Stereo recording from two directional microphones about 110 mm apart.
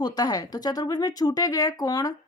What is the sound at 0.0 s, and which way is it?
Speech, 35° left (ahead or behind).